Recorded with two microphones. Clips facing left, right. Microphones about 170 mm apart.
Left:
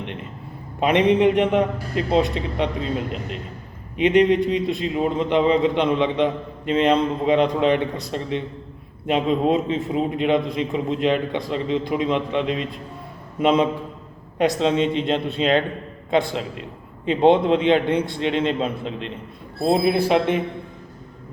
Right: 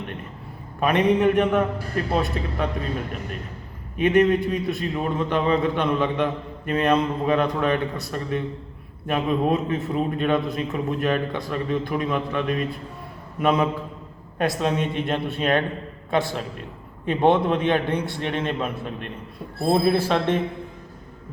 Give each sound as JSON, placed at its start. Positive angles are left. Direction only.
{"t": 0.8, "sound": "a man's voice", "side_deg": 20}
{"t": 3.9, "sound": "a man's voice", "side_deg": 20}